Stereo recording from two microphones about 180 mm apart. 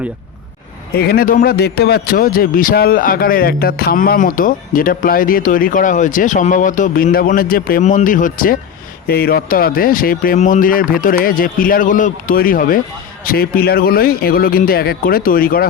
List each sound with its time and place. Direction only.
0.9 s a man's voice: 55° left (ahead or behind)